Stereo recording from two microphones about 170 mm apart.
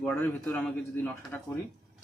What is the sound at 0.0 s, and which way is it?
A man's voice, 10° left (ahead or behind).